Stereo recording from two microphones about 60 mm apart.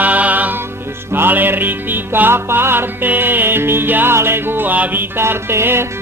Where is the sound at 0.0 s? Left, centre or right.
Right.